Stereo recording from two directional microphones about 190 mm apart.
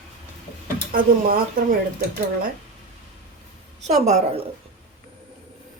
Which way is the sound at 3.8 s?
35° right (ahead or behind).